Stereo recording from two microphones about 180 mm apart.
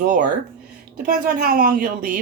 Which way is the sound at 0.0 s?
50° right (ahead or behind).